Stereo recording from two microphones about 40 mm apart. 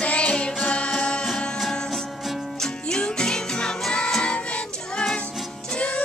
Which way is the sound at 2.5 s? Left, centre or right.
Centre.